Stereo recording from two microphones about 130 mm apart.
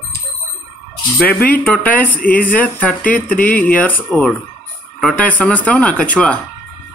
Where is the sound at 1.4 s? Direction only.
10° left (ahead or behind).